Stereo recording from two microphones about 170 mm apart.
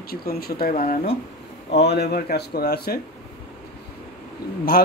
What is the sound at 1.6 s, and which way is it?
Speech, 75° left (ahead or behind).